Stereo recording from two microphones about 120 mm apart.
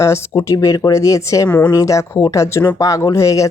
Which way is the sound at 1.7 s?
25° left (ahead or behind).